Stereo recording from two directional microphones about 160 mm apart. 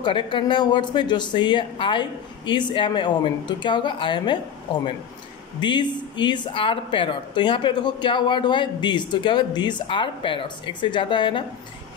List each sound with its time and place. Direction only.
0.0 s speech: 30° left (ahead or behind)
5.6 s speech: 30° left (ahead or behind)